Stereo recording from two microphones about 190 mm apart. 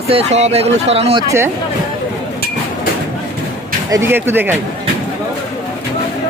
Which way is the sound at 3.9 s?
15° right (ahead or behind).